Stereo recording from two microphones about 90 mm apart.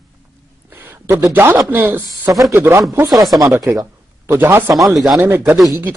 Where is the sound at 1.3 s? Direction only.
25° right (ahead or behind).